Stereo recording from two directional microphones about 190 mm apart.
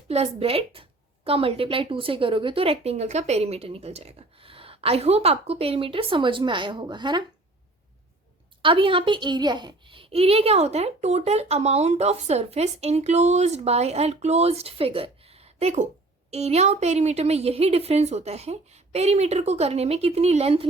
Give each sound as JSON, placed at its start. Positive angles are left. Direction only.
{"t": 0.1, "sound": "a woman's voice", "side_deg": -30}
{"t": 8.6, "sound": "a child's voice", "side_deg": -30}